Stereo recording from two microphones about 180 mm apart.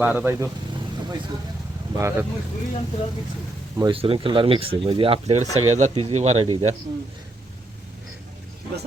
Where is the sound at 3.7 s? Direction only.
25° right (ahead or behind).